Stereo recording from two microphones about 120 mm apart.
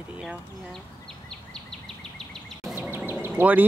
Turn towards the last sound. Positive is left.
turn(degrees=-15)  # may be behind; listen again after turning